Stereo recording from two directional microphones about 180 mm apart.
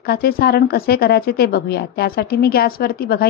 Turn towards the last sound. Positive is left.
turn(degrees=55)  # may be behind; listen again after turning